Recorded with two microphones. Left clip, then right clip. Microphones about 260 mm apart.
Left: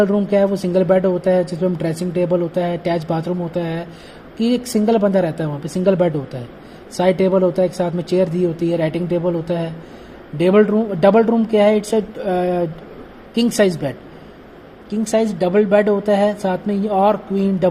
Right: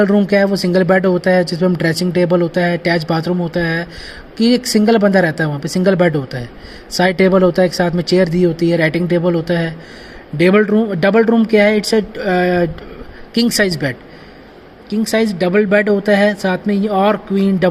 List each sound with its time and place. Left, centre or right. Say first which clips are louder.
0.0 s speech: right 2 dB; right